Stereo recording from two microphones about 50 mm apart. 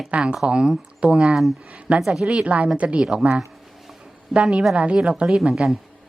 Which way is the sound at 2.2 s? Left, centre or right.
Right.